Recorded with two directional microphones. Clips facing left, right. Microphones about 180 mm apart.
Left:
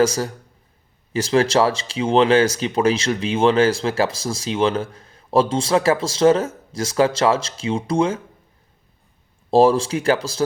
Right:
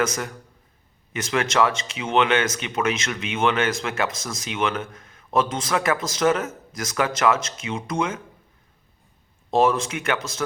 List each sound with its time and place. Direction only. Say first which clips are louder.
0.0 s speech: left 7 dB; 30° left (ahead or behind)
9.5 s speech: left 5 dB; 30° left (ahead or behind)